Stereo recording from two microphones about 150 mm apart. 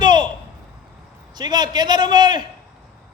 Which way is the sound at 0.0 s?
30° right (ahead or behind).